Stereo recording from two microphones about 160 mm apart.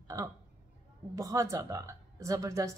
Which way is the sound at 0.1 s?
20° right (ahead or behind).